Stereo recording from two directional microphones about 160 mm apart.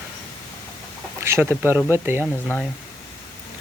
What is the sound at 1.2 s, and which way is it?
Speech, 15° right (ahead or behind).